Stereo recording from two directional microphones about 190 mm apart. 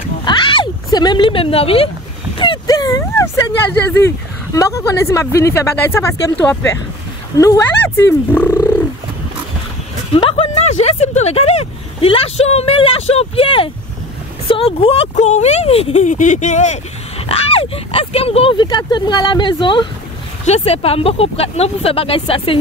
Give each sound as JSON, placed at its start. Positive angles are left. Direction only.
{"t": 0.2, "sound": "a sound", "side_deg": 25}
{"t": 4.6, "sound": "speech", "side_deg": 15}
{"t": 10.1, "sound": "speech", "side_deg": 30}